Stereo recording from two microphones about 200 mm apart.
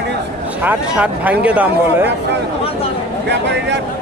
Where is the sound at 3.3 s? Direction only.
60° right (ahead or behind).